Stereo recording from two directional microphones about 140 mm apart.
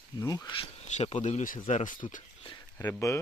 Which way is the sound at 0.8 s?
55° left (ahead or behind).